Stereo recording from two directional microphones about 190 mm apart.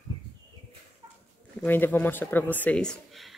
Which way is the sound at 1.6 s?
10° left (ahead or behind).